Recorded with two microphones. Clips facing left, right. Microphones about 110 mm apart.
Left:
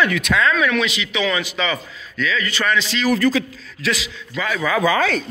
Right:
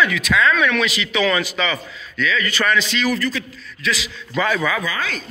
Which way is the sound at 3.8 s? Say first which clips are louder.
Left 1 dB; 90° left.